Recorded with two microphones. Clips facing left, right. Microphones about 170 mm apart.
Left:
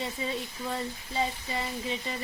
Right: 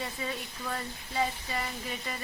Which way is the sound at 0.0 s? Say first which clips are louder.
Left 3 dB; 20° left (ahead or behind).